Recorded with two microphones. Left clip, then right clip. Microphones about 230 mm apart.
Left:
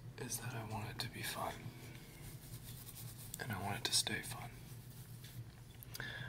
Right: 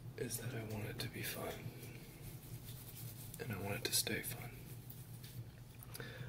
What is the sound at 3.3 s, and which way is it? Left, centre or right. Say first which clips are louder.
Whispering: left 2 dB; centre.